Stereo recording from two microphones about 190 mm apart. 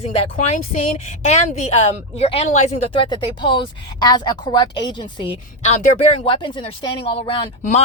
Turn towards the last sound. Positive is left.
turn(degrees=30)  # may be behind; listen again after turning